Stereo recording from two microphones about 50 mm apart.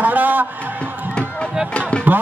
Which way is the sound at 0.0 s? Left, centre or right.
Right.